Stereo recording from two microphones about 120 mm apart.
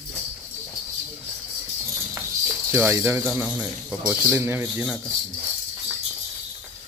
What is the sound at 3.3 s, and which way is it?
Speech, 10° right (ahead or behind).